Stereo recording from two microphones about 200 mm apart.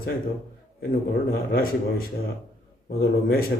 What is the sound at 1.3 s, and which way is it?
Speech, 50° left (ahead or behind).